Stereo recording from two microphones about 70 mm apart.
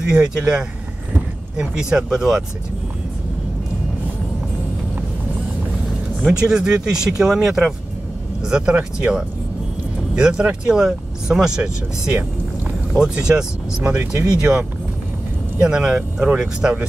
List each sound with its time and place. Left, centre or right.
0.1 s speech: centre
6.2 s speech: centre
12.1 s a sound: right
12.9 s speech: centre